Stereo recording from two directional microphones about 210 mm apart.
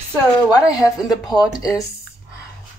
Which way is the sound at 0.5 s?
15° left (ahead or behind).